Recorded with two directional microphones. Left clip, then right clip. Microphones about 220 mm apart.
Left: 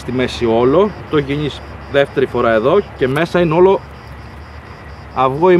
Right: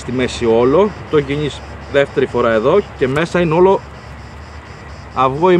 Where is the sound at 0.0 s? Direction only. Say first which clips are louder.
Even; 25° left (ahead or behind).